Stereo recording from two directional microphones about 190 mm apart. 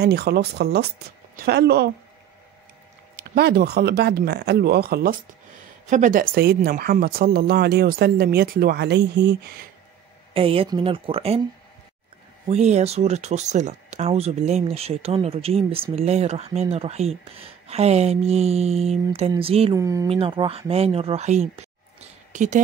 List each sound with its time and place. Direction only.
0.0 s speech: 60° right (ahead or behind)
3.2 s speech: 60° right (ahead or behind)
5.9 s speech: 40° right (ahead or behind); by 9.7 s 60° right (ahead or behind)
10.3 s speech: 30° right (ahead or behind)
12.4 s speech: 35° right (ahead or behind)
19.7 s speech: 15° right (ahead or behind)
20.1 s speech: 30° right (ahead or behind)